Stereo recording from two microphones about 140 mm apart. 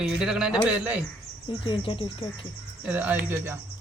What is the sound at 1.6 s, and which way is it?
Speech, 40° left (ahead or behind).